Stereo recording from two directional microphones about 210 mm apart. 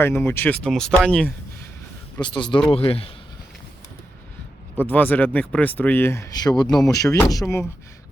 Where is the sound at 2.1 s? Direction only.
20° left (ahead or behind).